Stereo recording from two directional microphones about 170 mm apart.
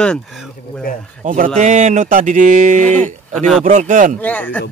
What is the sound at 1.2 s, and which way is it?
Speech, 50° right (ahead or behind).